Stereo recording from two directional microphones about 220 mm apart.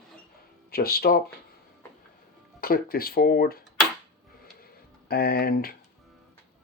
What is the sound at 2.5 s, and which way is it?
Speech, 45° left (ahead or behind).